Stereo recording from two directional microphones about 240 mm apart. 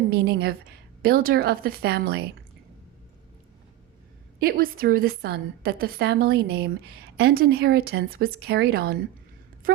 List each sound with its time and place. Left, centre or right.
0.1 s a woman's voice: right
4.4 s a woman's voice: right